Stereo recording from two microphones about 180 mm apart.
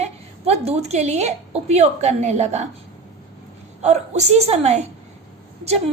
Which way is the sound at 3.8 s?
40° right (ahead or behind).